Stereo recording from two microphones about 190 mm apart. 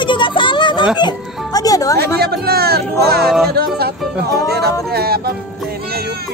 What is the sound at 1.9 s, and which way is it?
Speech, 55° right (ahead or behind).